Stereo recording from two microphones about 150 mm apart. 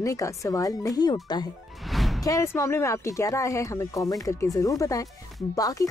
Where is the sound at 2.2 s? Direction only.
20° left (ahead or behind).